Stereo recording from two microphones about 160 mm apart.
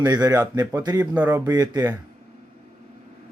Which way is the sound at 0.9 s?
10° right (ahead or behind).